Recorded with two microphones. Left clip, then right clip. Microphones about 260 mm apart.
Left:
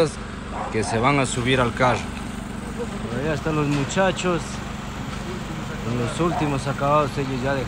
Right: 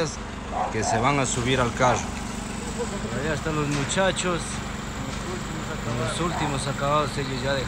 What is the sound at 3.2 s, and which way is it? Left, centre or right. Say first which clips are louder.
Speech: left 4 dB; centre.